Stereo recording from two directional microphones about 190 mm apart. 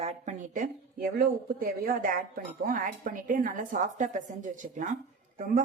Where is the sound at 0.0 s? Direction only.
35° right (ahead or behind).